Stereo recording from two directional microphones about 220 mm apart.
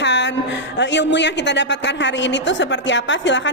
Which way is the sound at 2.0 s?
55° left (ahead or behind).